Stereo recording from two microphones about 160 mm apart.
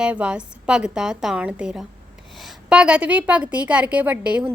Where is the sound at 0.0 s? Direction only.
5° right (ahead or behind).